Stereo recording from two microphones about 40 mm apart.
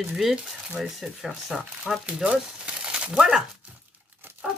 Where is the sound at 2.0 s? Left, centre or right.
Centre.